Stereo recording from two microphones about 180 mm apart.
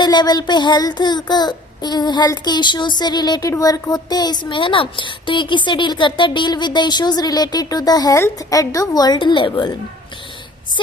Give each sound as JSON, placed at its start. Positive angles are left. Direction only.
{"t": 0.0, "sound": "speech", "side_deg": 25}